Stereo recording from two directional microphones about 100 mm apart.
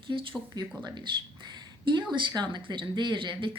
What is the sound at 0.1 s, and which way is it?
Speech, 40° right (ahead or behind).